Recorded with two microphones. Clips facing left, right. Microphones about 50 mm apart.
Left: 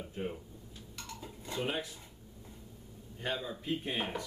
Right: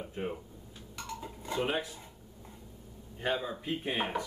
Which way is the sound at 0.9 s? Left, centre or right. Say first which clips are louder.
Right 6 dB; centre.